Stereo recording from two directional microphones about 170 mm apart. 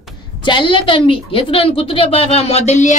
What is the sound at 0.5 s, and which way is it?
A woman's voice, 30° left (ahead or behind).